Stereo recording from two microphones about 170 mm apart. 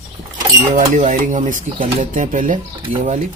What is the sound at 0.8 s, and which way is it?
Speech, 45° right (ahead or behind).